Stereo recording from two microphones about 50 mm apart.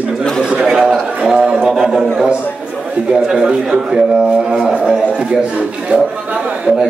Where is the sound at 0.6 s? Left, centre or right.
Centre.